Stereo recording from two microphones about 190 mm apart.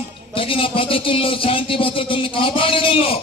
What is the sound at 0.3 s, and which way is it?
Speech, 30° left (ahead or behind).